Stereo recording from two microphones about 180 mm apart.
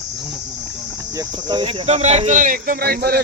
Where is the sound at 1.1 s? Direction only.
25° right (ahead or behind).